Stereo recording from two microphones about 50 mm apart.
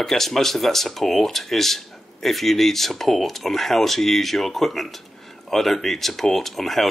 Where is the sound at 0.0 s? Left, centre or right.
Centre.